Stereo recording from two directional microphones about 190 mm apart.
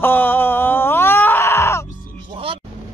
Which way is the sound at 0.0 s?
10° left (ahead or behind).